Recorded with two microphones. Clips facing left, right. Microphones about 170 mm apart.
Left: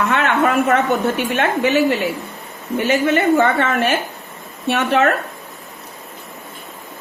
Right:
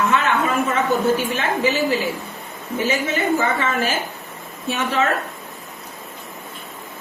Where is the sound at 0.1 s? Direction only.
65° left (ahead or behind).